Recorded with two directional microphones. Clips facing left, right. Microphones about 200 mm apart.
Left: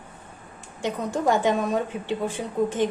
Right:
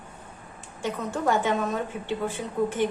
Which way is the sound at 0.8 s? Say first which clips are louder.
Left 3 dB; 15° left (ahead or behind).